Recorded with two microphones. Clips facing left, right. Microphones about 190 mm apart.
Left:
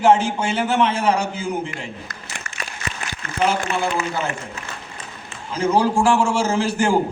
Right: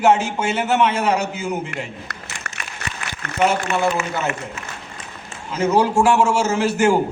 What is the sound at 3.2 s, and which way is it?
Speech, 65° right (ahead or behind).